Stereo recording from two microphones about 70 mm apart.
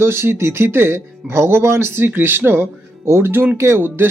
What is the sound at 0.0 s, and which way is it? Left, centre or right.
Speech, right.